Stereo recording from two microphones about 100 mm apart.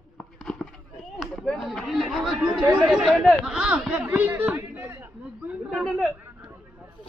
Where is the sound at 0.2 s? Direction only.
5° left (ahead or behind).